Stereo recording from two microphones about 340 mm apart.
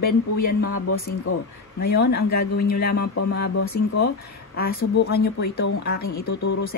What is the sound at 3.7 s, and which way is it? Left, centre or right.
Speech, left.